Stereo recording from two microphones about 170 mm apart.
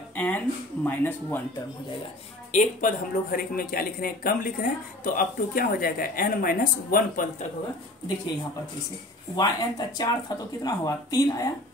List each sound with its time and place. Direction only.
0.1 s a sound: 10° left (ahead or behind)
0.8 s speech: 10° left (ahead or behind)
2.5 s speech: 50° left (ahead or behind)
9.3 s speech: 25° left (ahead or behind)